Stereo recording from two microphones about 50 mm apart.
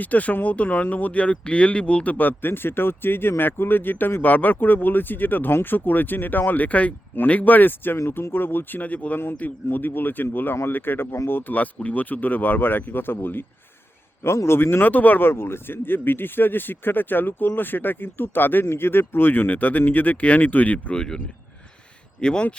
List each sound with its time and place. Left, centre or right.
0.0 s speech: left
8.8 s speech: left
9.1 s speech: left
11.5 s speech: left
14.3 s speech: left
15.2 s speech: left
22.2 s speech: centre